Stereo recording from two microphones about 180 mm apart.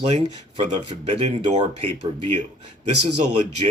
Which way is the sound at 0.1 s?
40° right (ahead or behind).